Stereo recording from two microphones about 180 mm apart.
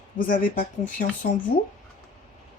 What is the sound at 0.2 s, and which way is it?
Speech, 50° left (ahead or behind).